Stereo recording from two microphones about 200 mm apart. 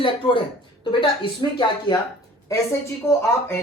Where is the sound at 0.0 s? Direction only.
25° left (ahead or behind).